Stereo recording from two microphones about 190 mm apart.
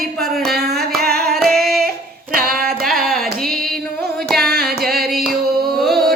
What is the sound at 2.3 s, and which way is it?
Singing, 50° right (ahead or behind).